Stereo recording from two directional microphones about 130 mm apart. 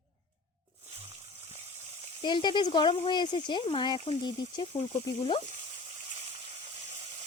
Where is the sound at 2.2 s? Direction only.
35° left (ahead or behind).